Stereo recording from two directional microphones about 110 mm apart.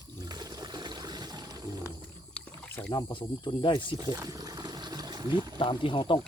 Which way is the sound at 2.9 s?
50° left (ahead or behind).